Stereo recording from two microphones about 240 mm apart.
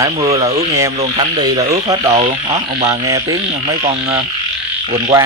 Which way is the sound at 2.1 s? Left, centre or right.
Right.